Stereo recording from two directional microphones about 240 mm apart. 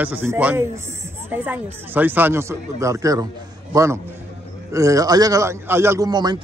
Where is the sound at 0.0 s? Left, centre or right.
Centre.